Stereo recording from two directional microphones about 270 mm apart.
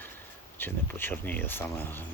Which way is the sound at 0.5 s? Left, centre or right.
Centre.